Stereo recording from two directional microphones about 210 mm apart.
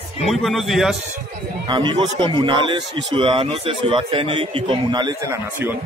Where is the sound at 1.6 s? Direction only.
25° right (ahead or behind).